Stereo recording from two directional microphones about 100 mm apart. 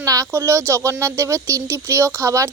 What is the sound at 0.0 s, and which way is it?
Speech, 35° right (ahead or behind).